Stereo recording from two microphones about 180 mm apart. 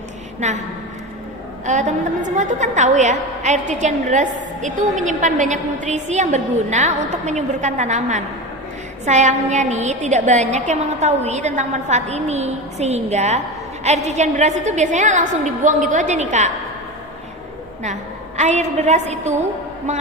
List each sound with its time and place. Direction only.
0.3 s a woman's voice: 40° right (ahead or behind)
1.6 s a woman's voice: 40° right (ahead or behind)
18.3 s a woman's voice: 40° right (ahead or behind)